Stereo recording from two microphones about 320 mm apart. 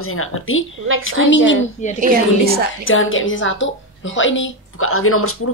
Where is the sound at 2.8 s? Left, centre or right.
Left.